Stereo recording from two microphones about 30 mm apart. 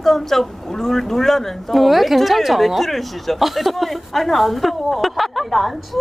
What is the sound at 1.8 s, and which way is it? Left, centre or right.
Speech, centre.